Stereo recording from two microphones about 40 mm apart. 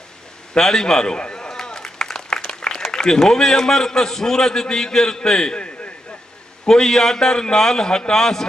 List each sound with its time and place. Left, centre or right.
0.6 s a man's voice: centre
1.5 s a sound: centre
2.6 s a man's voice: centre